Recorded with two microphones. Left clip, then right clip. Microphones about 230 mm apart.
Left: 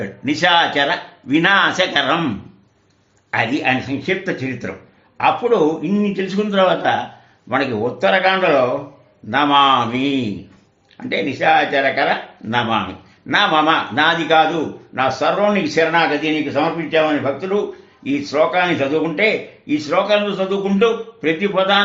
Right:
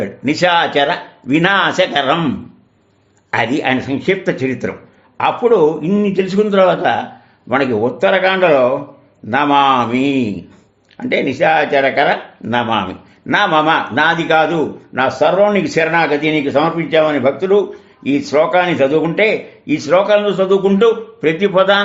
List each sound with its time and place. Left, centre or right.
0.0 s speech: right
3.3 s a man's voice: right